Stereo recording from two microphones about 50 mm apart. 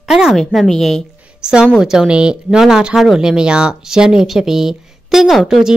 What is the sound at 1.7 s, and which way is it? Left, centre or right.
A woman's voice, centre.